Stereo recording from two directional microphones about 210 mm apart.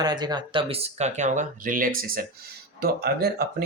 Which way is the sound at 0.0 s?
20° right (ahead or behind).